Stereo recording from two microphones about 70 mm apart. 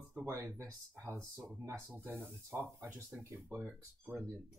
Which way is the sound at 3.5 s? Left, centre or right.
Right.